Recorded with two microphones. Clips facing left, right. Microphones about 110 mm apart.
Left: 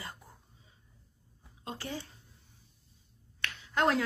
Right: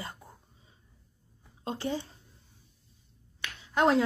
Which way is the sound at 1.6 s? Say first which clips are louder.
Right 7 dB; 25° right (ahead or behind).